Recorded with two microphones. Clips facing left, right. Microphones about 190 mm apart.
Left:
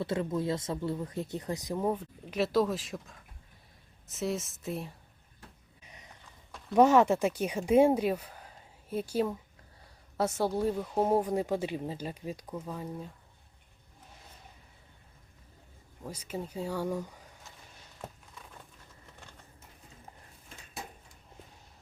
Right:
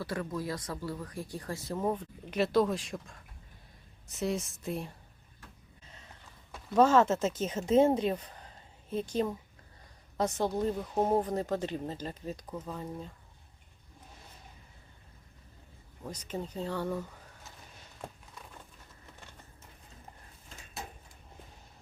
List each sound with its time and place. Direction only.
0.0 s speech: 25° left (ahead or behind); by 4.9 s centre (ahead or behind)
5.8 s a sound: 15° left (ahead or behind)
6.7 s speech: 15° left (ahead or behind)
16.0 s speech: 10° left (ahead or behind)